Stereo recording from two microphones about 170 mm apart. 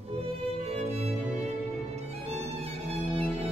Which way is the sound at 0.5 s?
40° right (ahead or behind).